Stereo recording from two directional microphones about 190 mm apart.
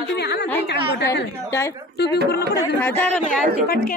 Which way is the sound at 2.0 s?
60° left (ahead or behind).